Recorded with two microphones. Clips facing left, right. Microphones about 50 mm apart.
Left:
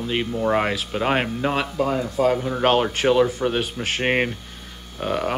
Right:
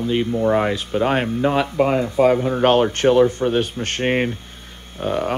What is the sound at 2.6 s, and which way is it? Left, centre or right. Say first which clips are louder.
Speech: right 3 dB; centre.